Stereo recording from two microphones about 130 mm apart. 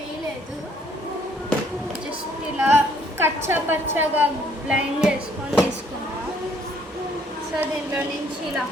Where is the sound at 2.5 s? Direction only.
15° right (ahead or behind).